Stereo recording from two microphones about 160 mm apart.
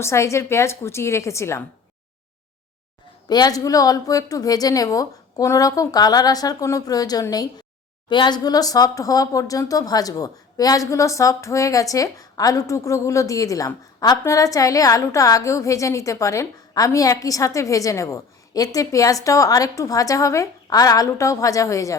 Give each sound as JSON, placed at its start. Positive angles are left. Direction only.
{"t": 0.0, "sound": "a woman's voice", "side_deg": 20}
{"t": 3.2, "sound": "speech", "side_deg": 25}